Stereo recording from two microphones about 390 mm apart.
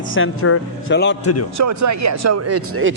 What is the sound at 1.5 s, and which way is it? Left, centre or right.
Speech, right.